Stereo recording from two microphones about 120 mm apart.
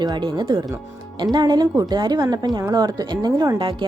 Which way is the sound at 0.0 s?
35° right (ahead or behind).